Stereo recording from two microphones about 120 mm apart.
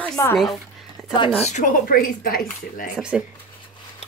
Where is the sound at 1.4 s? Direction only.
85° left.